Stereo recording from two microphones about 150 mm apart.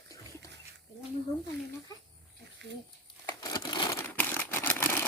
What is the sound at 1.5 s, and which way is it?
Speech, 90° right.